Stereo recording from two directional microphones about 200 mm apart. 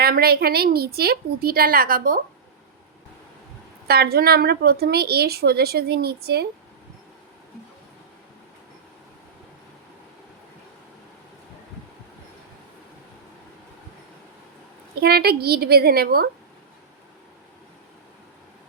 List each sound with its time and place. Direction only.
0.0 s a woman's voice: 50° right (ahead or behind)
3.8 s a woman's voice: 50° right (ahead or behind)
15.0 s a woman's voice: 50° right (ahead or behind)